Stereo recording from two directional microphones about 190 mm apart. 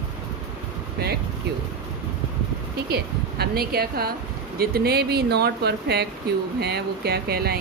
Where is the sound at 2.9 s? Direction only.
55° right (ahead or behind).